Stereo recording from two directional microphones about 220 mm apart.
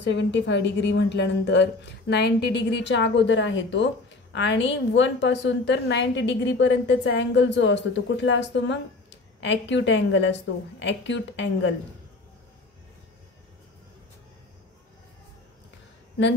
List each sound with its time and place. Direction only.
0.0 s a woman's voice: 55° left (ahead or behind)